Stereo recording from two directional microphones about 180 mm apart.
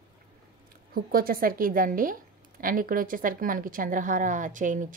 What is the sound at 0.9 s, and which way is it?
A woman's voice, 55° right (ahead or behind).